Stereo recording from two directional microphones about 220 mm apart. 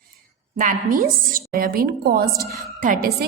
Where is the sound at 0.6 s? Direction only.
40° right (ahead or behind).